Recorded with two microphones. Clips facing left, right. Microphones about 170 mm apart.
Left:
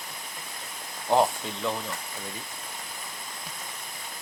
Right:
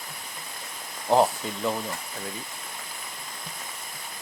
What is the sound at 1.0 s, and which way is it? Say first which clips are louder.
Speech: right 2 dB; 5° right (ahead or behind).